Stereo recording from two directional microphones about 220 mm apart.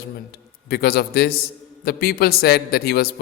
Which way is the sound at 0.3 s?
45° left (ahead or behind).